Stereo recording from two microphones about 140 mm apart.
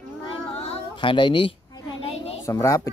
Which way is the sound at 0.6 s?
35° left (ahead or behind).